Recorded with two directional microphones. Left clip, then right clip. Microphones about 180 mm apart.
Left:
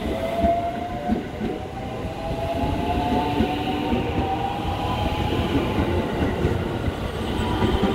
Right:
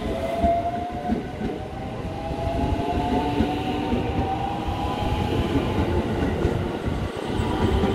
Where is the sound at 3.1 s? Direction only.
40° left (ahead or behind).